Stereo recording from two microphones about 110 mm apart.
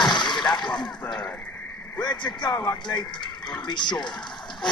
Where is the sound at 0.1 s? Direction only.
45° left (ahead or behind).